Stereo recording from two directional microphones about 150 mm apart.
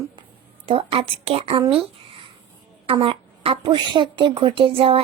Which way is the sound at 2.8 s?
35° right (ahead or behind).